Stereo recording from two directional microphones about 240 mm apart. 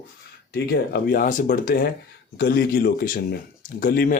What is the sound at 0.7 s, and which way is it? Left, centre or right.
A man's voice, left.